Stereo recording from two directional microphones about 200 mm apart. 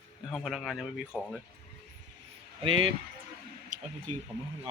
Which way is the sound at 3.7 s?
40° right (ahead or behind).